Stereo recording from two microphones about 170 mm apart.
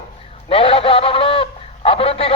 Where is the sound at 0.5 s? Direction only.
30° left (ahead or behind).